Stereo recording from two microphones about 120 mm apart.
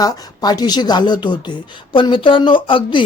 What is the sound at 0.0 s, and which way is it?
Speech, 35° left (ahead or behind).